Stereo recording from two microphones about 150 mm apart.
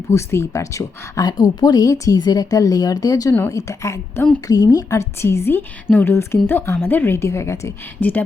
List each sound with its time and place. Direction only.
0.1 s a woman's voice: 20° left (ahead or behind)